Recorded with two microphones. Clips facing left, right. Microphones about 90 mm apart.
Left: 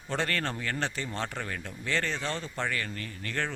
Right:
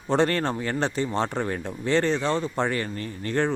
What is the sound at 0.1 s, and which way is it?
Speech, 25° right (ahead or behind).